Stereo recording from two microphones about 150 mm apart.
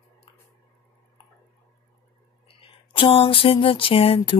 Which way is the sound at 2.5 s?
35° left (ahead or behind).